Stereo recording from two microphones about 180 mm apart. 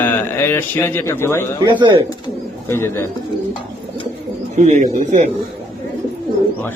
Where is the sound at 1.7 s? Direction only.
25° right (ahead or behind).